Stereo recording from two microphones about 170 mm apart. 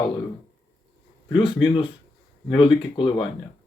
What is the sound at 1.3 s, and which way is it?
Speech, 30° left (ahead or behind).